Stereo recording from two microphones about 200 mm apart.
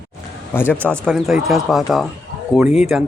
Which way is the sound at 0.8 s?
5° left (ahead or behind).